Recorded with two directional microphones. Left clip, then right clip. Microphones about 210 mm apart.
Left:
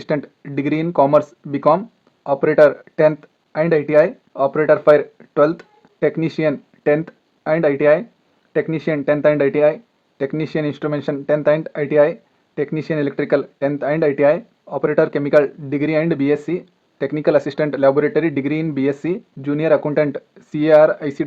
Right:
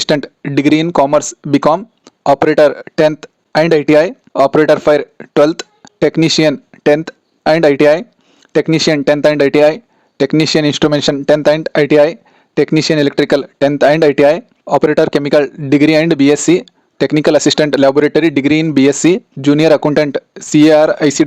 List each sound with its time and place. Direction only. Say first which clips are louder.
0.0 s speech: right 8 dB; 45° right (ahead or behind)